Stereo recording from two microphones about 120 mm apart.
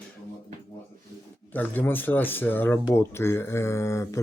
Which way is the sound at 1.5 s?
15° left (ahead or behind).